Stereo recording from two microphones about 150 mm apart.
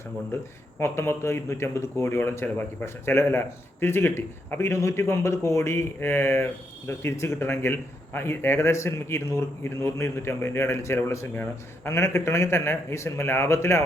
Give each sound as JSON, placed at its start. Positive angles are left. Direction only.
{"t": 0.8, "sound": "a man's voice", "side_deg": 15}